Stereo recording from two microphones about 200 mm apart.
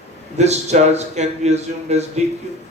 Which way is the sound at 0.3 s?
35° right (ahead or behind).